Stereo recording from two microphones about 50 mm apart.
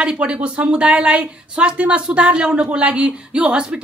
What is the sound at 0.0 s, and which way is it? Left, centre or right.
Speech, right.